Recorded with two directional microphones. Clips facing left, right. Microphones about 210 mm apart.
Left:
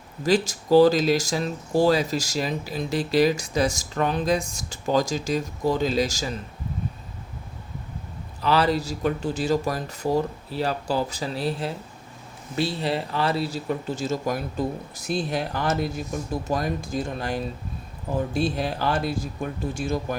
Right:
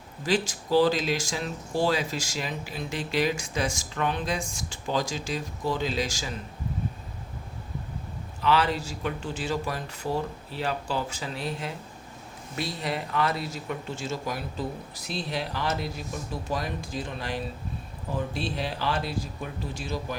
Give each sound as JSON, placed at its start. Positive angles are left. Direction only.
{"t": 0.3, "sound": "speech", "side_deg": 40}
{"t": 8.4, "sound": "speech", "side_deg": 35}